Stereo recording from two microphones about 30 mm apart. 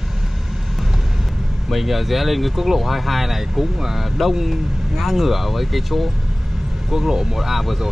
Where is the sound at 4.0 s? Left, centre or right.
Centre.